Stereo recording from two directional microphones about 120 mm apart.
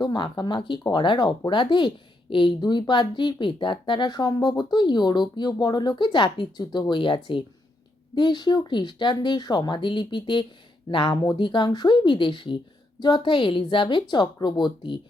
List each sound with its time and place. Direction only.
0.0 s speech: 40° left (ahead or behind)